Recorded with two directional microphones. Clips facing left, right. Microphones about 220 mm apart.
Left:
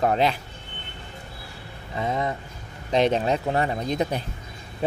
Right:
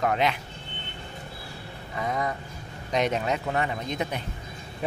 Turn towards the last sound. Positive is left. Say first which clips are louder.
# left 5 dB
turn(degrees=35)  # may be behind; listen again after turning